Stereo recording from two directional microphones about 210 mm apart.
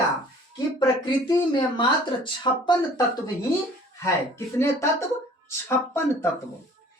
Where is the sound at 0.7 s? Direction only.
20° left (ahead or behind).